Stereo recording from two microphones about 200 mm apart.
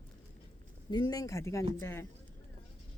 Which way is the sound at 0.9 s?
20° left (ahead or behind).